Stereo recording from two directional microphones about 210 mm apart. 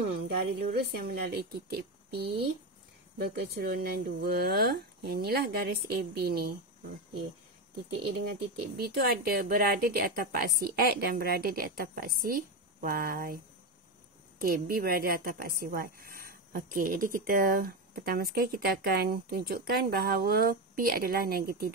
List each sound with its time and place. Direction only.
0.3 s speech: 50° right (ahead or behind)
3.2 s speech: 50° right (ahead or behind)
8.7 s speech: 50° right (ahead or behind)
14.4 s speech: 45° right (ahead or behind)